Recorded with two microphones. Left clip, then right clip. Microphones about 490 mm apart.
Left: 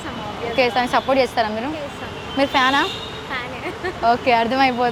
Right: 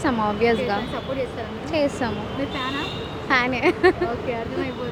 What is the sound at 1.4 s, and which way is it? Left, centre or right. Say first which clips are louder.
Speech: left 12 dB; left.